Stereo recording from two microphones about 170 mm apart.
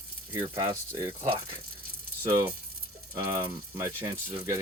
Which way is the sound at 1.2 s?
30° right (ahead or behind).